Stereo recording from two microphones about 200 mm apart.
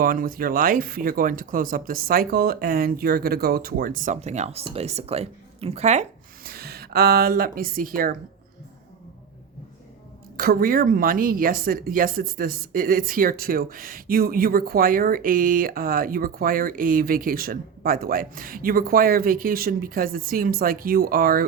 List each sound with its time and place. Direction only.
0.0 s speech: 45° right (ahead or behind)
6.4 s speech: 50° right (ahead or behind)
10.3 s speech: 45° right (ahead or behind)